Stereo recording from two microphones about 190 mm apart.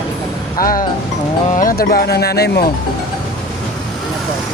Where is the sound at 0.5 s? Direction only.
50° left (ahead or behind).